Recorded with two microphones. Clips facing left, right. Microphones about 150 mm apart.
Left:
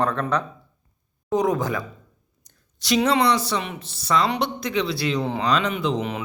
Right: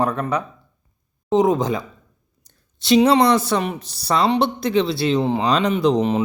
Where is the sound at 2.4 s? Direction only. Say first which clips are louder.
Right 6 dB; 25° right (ahead or behind).